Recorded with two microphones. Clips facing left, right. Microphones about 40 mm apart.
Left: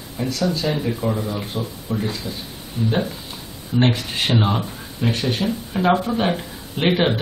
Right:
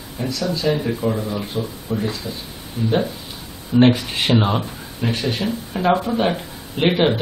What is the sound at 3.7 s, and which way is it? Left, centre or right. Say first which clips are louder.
Speech: right 5 dB; centre.